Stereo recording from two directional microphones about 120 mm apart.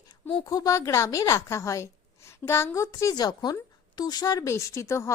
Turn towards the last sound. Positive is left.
turn(degrees=25)  # may be behind; listen again after turning